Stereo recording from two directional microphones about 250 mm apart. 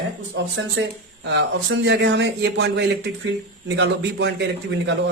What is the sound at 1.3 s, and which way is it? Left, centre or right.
Speech, right.